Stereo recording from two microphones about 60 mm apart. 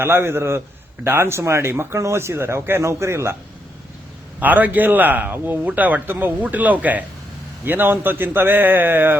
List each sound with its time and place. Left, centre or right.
0.0 s a man's voice: right
4.4 s a man's voice: right